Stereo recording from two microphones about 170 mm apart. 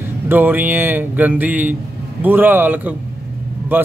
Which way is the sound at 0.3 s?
10° right (ahead or behind).